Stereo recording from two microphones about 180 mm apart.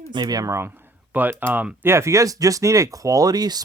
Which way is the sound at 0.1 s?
25° right (ahead or behind).